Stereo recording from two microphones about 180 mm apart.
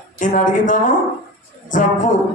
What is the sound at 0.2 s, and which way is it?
Speech, 45° left (ahead or behind).